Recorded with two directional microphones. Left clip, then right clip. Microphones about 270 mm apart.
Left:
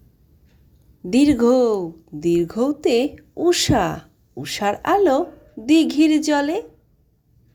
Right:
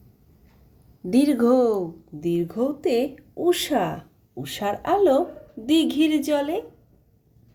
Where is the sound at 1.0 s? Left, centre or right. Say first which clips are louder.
Left 3 dB; left.